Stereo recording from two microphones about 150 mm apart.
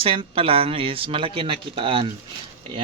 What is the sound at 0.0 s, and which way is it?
Speech, 35° right (ahead or behind).